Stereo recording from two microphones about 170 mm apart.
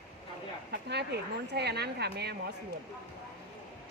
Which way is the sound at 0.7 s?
80° right.